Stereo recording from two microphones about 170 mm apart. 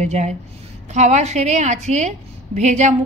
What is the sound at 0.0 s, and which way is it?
A woman's voice, 45° right (ahead or behind).